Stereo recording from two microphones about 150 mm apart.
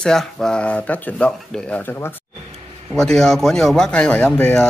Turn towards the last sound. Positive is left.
turn(degrees=10)  # may be behind; listen again after turning